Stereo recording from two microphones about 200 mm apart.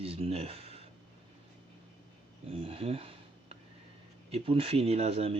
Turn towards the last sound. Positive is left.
turn(degrees=-30)  # may be behind; listen again after turning